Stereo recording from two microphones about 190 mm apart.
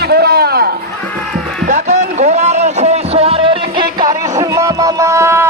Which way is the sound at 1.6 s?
40° right (ahead or behind).